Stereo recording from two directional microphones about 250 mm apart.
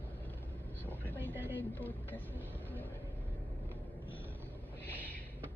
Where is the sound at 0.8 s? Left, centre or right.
Centre.